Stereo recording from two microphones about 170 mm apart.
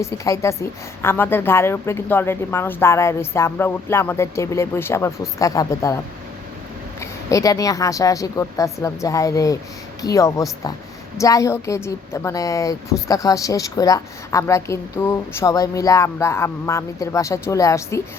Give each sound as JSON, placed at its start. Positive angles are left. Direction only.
{"t": 0.0, "sound": "a woman's voice", "side_deg": 15}
{"t": 7.0, "sound": "a woman's voice", "side_deg": 20}